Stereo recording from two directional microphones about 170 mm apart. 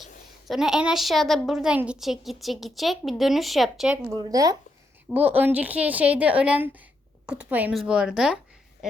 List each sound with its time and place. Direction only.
0.0 s a woman's voice: centre (ahead or behind)
3.9 s speech: 20° right (ahead or behind)
5.1 s a woman's voice: 10° right (ahead or behind)
8.8 s quack: 5° right (ahead or behind)